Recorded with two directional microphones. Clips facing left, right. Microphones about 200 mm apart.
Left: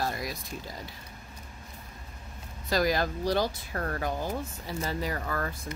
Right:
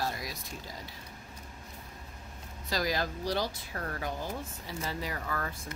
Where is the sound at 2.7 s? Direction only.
55° left (ahead or behind).